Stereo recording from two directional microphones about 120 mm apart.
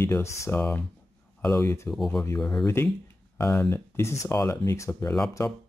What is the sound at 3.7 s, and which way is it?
Speech, 25° left (ahead or behind).